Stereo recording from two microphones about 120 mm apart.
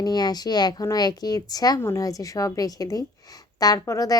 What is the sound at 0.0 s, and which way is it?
A woman's voice, 35° left (ahead or behind).